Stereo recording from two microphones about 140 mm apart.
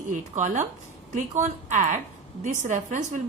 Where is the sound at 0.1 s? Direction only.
60° right (ahead or behind).